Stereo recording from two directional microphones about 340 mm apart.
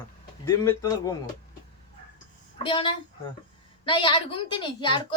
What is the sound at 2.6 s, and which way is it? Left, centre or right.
Speech, centre.